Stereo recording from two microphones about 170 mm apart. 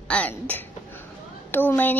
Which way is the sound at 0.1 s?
10° left (ahead or behind).